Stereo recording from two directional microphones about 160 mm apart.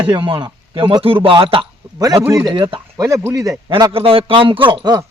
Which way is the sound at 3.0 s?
20° right (ahead or behind).